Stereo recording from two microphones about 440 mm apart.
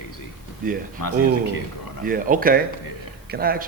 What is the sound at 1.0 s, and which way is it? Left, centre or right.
Speech, left.